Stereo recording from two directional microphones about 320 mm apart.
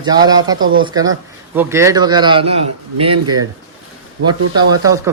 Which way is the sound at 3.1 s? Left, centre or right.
Right.